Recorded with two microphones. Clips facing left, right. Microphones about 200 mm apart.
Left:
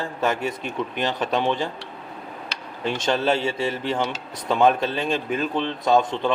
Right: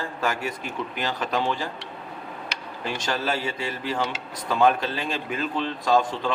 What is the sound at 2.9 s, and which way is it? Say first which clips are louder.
A man's voice: left 6 dB; 25° left (ahead or behind).